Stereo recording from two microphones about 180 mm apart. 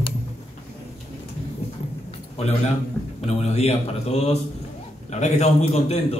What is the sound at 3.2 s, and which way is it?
A man's voice, 35° left (ahead or behind).